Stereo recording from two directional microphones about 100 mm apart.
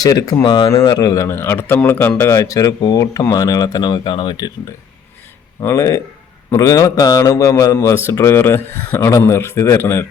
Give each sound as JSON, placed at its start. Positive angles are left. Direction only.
{"t": 0.0, "sound": "speech", "side_deg": 40}
{"t": 0.4, "sound": "speech", "side_deg": 50}
{"t": 0.9, "sound": "speech", "side_deg": 40}
{"t": 2.3, "sound": "speech", "side_deg": 35}
{"t": 5.5, "sound": "speech", "side_deg": 30}